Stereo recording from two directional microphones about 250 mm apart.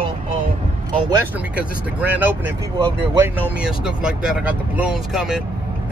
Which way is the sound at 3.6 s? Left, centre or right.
Centre.